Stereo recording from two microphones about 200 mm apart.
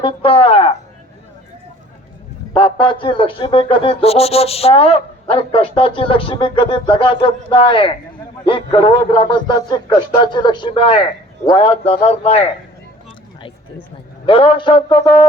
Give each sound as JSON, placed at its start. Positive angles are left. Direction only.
{"t": 0.0, "sound": "speech", "side_deg": 30}
{"t": 2.5, "sound": "speech", "side_deg": 25}
{"t": 14.3, "sound": "speech", "side_deg": 25}